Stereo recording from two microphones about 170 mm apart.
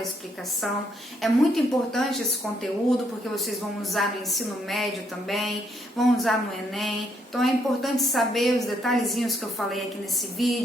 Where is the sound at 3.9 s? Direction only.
Centre (ahead or behind).